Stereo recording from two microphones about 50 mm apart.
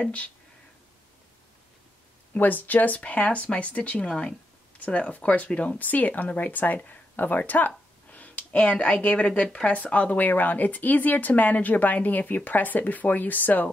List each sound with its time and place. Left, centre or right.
2.3 s speech: left